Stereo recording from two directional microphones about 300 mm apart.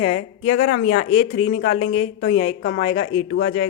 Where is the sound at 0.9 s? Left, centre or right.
Left.